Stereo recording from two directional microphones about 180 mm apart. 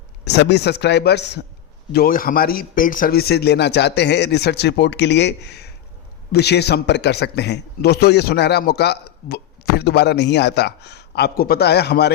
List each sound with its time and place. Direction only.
0.3 s a man's voice: 65° left (ahead or behind)
1.9 s a man's voice: 55° left (ahead or behind)